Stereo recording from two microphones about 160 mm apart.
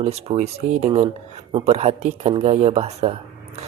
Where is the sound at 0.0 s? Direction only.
40° right (ahead or behind).